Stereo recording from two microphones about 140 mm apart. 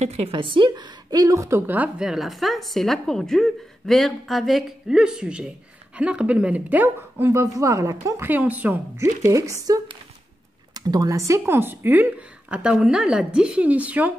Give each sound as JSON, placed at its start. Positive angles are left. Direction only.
{"t": 0.0, "sound": "a woman's voice", "side_deg": -50}